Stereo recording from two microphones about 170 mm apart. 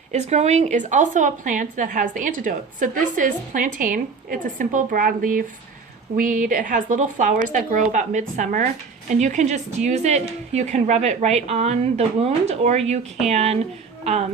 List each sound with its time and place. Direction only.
0.1 s a woman's voice: 40° right (ahead or behind)